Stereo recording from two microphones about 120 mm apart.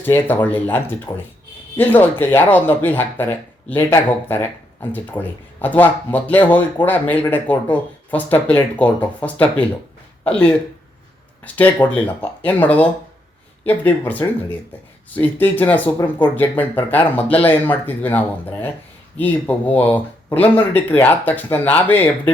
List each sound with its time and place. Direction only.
0.0 s speech: 15° left (ahead or behind)
14.2 s speech: 25° left (ahead or behind)